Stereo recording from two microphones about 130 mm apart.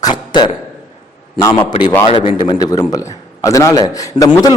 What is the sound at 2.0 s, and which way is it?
Speech, 45° left (ahead or behind).